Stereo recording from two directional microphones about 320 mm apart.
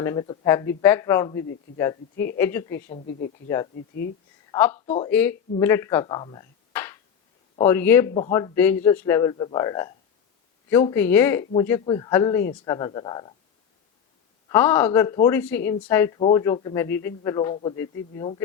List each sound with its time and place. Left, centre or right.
0.0 s a man's voice: centre
4.5 s a man's voice: centre
14.5 s a man's voice: centre